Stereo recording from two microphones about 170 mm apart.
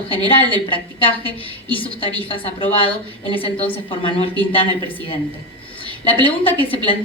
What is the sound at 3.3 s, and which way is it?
Speech, 30° left (ahead or behind).